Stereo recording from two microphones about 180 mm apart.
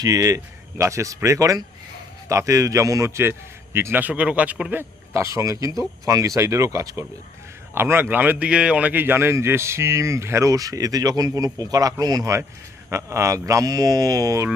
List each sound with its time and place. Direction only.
0.0 s a man's voice: 20° right (ahead or behind)